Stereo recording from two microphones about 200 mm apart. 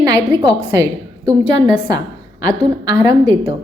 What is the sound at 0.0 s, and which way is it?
A woman's voice, 15° right (ahead or behind).